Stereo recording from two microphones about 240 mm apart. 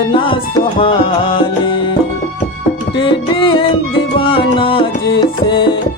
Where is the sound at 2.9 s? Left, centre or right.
Left.